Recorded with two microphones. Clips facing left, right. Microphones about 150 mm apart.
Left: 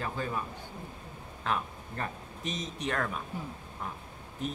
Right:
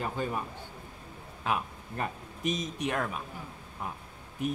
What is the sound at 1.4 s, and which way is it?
Speech, 10° right (ahead or behind).